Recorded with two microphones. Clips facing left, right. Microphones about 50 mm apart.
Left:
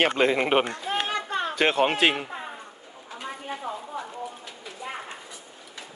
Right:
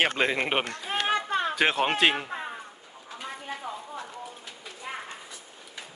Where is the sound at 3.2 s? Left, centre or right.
Centre.